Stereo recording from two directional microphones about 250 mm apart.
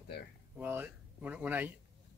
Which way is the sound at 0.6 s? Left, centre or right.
Centre.